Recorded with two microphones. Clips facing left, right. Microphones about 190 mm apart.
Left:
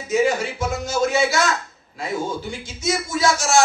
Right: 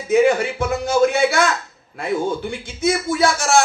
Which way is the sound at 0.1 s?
55° right (ahead or behind).